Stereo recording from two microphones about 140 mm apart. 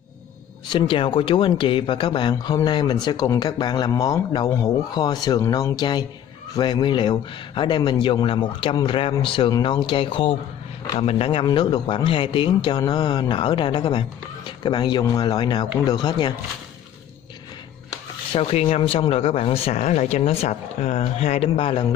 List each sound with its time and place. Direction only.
0.7 s a man's voice: 35° left (ahead or behind)
18.3 s speech: 45° left (ahead or behind)